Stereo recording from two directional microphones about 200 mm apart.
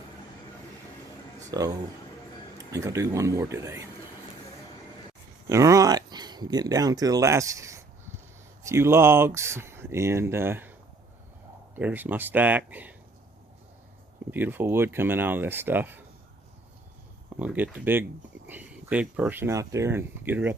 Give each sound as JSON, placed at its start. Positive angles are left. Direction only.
{"t": 1.5, "sound": "speech", "side_deg": -20}
{"t": 5.5, "sound": "speech", "side_deg": -15}
{"t": 14.3, "sound": "speech", "side_deg": -10}
{"t": 17.2, "sound": "speech", "side_deg": -10}